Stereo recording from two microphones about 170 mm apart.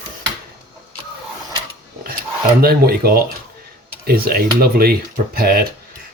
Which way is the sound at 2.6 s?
65° right (ahead or behind).